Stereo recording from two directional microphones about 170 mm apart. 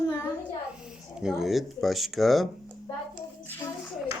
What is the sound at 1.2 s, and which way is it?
Speech, 5° right (ahead or behind).